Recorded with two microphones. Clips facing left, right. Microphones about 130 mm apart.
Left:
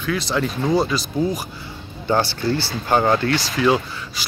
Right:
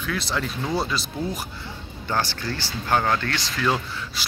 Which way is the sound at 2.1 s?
20° left (ahead or behind).